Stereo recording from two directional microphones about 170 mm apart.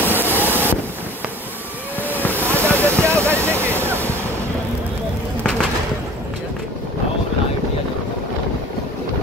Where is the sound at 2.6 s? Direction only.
15° right (ahead or behind).